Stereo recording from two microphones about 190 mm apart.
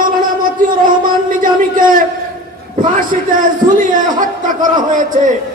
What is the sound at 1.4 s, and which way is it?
A man's voice, 45° right (ahead or behind).